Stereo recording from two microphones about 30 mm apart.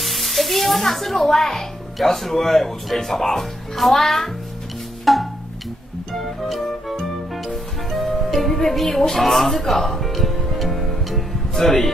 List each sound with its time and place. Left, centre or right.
0.0 s speech: centre
5.0 s music: centre